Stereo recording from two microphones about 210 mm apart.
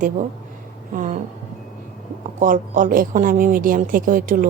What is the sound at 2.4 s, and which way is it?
A woman's voice, 40° right (ahead or behind).